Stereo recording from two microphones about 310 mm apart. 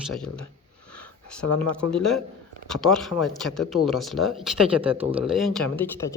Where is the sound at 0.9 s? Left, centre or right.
Centre.